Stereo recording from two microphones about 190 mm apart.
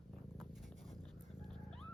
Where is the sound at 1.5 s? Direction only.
5° left (ahead or behind).